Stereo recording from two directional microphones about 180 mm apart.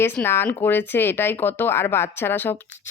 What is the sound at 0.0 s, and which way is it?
Speech, 15° left (ahead or behind).